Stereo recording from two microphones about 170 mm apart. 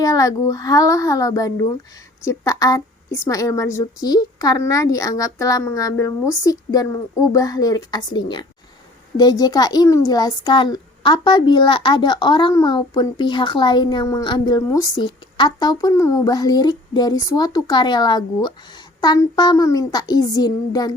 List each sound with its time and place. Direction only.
0.0 s a child's voice: 20° left (ahead or behind)